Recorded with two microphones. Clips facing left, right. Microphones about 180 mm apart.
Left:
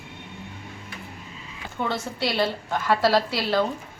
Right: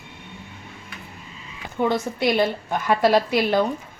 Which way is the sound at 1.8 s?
15° right (ahead or behind).